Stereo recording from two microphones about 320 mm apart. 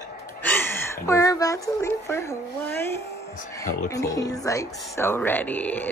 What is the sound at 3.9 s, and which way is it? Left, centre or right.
Speech, centre.